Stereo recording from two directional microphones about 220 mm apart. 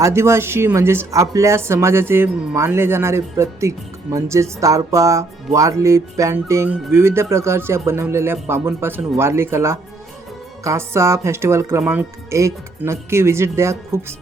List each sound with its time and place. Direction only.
0.0 s speech: 10° right (ahead or behind)